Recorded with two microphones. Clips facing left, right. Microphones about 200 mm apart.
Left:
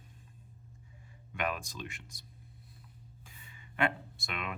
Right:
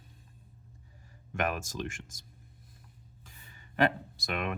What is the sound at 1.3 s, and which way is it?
Speech, 45° right (ahead or behind).